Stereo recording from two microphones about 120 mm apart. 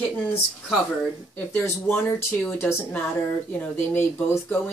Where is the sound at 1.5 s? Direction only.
15° left (ahead or behind).